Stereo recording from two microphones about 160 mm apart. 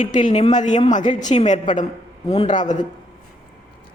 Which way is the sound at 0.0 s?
50° left (ahead or behind).